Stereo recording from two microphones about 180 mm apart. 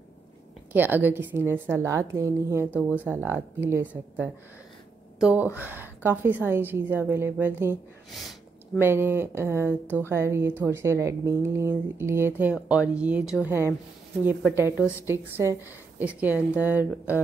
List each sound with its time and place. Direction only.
0.7 s a woman's voice: 10° right (ahead or behind)
8.1 s speech: centre (ahead or behind)
8.7 s a woman's voice: 10° right (ahead or behind)